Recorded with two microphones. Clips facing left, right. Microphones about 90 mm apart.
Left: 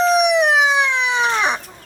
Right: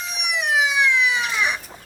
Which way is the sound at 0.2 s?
35° left (ahead or behind).